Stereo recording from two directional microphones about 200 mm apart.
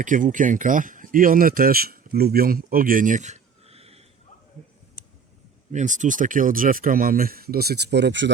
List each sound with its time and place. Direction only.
0.0 s speech: 40° right (ahead or behind)
5.7 s speech: 40° right (ahead or behind); by 8.3 s 60° right (ahead or behind)